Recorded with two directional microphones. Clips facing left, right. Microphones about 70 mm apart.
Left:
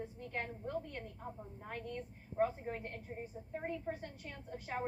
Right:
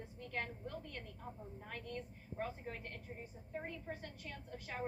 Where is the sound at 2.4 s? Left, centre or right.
Left.